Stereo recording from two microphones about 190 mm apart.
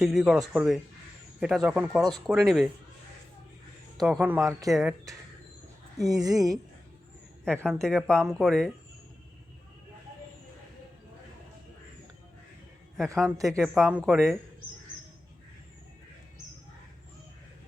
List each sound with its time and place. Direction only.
0.0 s speech: centre (ahead or behind)
4.0 s speech: 5° right (ahead or behind)
4.7 s speech: centre (ahead or behind)
6.0 s a woman's voice: 20° right (ahead or behind)
7.6 s speech: 5° left (ahead or behind)
13.2 s speech: 15° right (ahead or behind)
13.5 s speech: centre (ahead or behind)